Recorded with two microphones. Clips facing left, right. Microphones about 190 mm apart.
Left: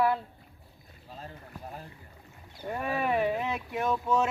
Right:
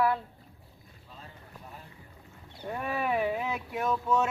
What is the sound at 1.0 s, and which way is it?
Boat, 40° left (ahead or behind).